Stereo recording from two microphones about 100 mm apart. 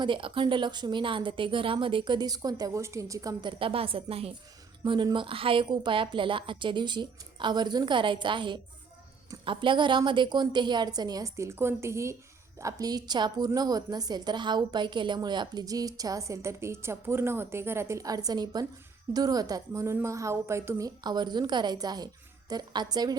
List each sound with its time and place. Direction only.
0.0 s a woman's voice: 55° right (ahead or behind); by 3.5 s 35° right (ahead or behind)
3.6 s a woman's voice: 65° right (ahead or behind); by 23.1 s 45° right (ahead or behind)